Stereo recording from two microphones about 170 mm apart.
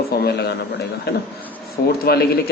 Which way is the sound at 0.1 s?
70° left (ahead or behind).